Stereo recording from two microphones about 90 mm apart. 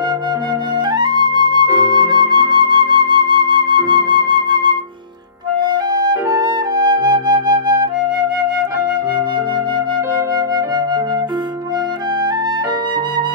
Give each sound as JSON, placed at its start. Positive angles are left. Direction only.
{"t": 0.8, "sound": "flute", "side_deg": -55}
{"t": 10.1, "sound": "flute", "side_deg": -50}